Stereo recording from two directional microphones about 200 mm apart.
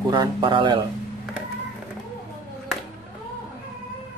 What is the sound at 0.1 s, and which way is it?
Speech, 25° right (ahead or behind).